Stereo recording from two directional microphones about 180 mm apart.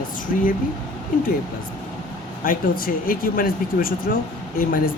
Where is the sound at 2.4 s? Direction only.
50° left (ahead or behind).